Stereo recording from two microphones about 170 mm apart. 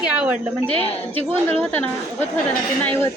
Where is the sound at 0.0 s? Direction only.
5° right (ahead or behind).